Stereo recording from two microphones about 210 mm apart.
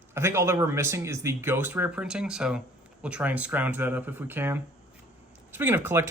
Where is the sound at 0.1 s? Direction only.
10° right (ahead or behind).